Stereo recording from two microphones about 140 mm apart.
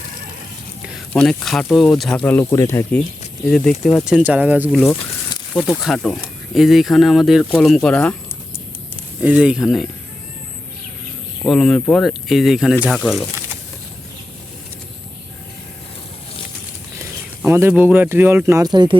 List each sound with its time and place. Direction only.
1.1 s speech: 5° left (ahead or behind)
2.4 s speech: 20° left (ahead or behind)
3.5 s speech: 5° left (ahead or behind)
4.0 s speech: 5° right (ahead or behind)
9.2 s speech: 10° right (ahead or behind)
11.4 s speech: 5° left (ahead or behind)
17.4 s speech: 15° right (ahead or behind); by 18.9 s 30° right (ahead or behind)